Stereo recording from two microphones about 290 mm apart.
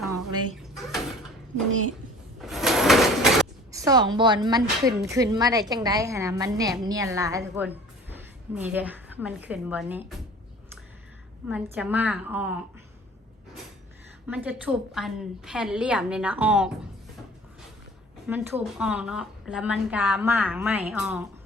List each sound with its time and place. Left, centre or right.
0.5 s drawer open or close: centre
2.4 s a sound: centre
3.7 s a woman's voice: centre
11.4 s a woman's voice: centre
14.3 s a woman's voice: centre
18.3 s a woman's voice: centre